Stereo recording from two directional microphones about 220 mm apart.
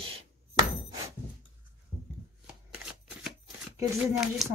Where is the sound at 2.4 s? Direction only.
5° right (ahead or behind).